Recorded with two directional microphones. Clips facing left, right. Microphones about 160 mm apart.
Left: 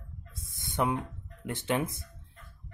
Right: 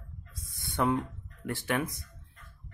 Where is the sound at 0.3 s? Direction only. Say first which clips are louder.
Even; 25° left (ahead or behind).